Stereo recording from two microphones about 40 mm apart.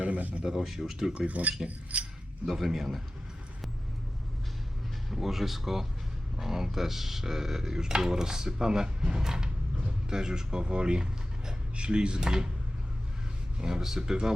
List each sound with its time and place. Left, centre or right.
0.0 s a sound: right
0.4 s speech: centre
1.3 s speech: right
2.5 s speech: centre
5.0 s speech: centre
13.6 s speech: centre